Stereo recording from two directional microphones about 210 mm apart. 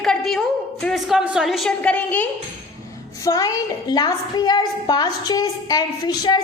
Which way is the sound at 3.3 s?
15° left (ahead or behind).